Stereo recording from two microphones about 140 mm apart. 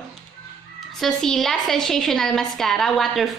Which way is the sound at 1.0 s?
5° left (ahead or behind).